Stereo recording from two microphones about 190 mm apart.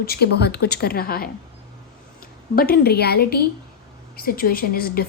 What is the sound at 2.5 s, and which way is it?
A woman's voice, 55° left (ahead or behind).